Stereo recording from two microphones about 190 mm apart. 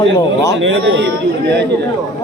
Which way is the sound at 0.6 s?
80° right.